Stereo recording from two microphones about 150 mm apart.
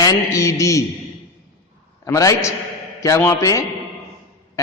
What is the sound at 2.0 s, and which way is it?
Speech, 20° left (ahead or behind).